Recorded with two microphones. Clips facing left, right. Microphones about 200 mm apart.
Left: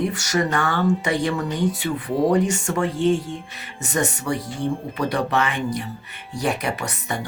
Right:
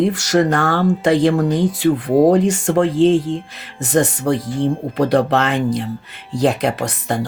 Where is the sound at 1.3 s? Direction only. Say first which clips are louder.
Right 7 dB; 50° right (ahead or behind).